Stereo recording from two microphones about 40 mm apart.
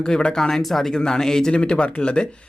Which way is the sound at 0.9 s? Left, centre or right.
Centre.